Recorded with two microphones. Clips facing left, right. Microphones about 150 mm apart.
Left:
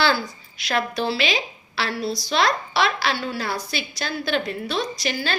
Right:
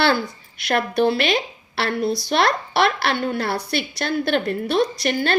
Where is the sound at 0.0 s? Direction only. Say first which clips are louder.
Right 2 dB; 55° right (ahead or behind).